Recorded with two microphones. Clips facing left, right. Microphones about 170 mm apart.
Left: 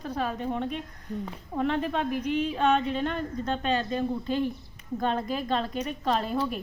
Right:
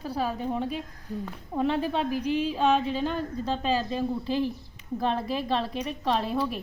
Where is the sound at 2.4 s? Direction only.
Centre (ahead or behind).